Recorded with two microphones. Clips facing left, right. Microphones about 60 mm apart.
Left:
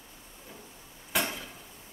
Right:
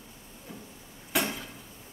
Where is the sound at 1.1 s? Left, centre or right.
Centre.